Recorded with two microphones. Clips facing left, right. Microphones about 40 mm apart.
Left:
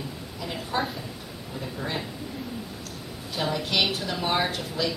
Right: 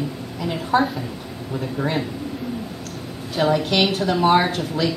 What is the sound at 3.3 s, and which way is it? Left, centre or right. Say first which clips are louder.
Speech: right 7 dB; right.